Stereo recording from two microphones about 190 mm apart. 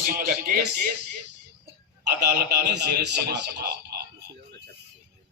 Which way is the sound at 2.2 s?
60° right (ahead or behind).